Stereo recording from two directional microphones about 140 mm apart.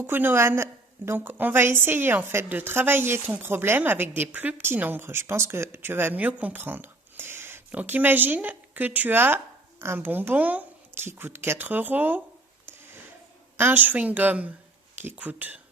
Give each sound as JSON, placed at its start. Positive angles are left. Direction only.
{"t": 0.0, "sound": "a woman's voice", "side_deg": -15}
{"t": 13.6, "sound": "a woman's voice", "side_deg": -15}